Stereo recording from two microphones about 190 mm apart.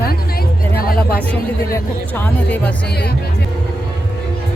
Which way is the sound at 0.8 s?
55° left (ahead or behind).